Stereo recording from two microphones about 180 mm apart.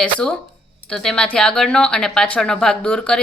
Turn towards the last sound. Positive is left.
turn(degrees=5)  # may be behind; listen again after turning